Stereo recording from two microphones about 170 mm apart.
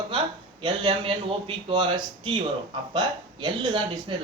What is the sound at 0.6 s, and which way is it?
A man's voice, 30° right (ahead or behind).